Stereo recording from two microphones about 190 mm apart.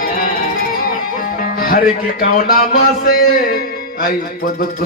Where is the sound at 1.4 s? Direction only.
50° left (ahead or behind).